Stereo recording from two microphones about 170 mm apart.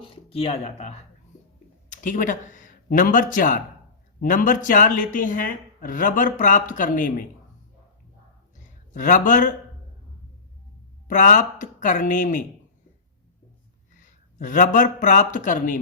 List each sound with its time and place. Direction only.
0.0 s speech: 35° left (ahead or behind); by 7.3 s 50° left (ahead or behind)
8.9 s speech: 50° left (ahead or behind)
11.1 s speech: 50° left (ahead or behind)
14.0 s a man's voice: 50° left (ahead or behind)